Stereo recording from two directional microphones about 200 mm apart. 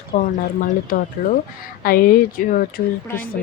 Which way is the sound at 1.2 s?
45° left (ahead or behind).